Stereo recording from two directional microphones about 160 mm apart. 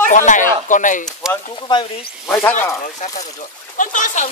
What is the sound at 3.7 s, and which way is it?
Speech, 55° left (ahead or behind).